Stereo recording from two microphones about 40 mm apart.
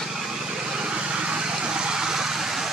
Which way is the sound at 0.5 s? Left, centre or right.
Centre.